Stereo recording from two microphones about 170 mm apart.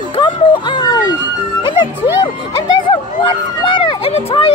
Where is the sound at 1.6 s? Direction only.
30° left (ahead or behind).